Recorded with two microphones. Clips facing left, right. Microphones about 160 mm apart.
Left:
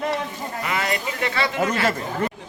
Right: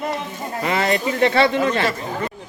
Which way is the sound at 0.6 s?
30° right (ahead or behind).